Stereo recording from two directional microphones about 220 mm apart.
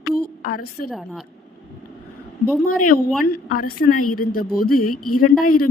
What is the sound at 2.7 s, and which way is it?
Speech, 90° left.